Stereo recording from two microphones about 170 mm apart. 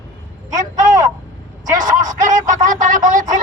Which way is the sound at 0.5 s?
45° right (ahead or behind).